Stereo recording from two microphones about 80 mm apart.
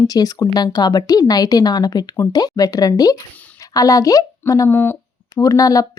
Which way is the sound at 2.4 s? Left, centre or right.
Left.